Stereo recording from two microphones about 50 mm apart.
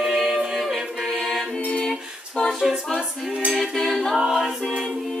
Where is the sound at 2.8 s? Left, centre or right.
Centre.